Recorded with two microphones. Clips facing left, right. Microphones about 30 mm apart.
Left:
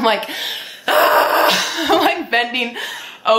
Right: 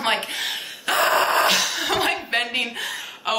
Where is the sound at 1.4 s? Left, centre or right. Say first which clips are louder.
Left 4 dB; centre.